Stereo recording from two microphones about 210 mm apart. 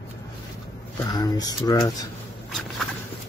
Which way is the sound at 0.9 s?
20° left (ahead or behind).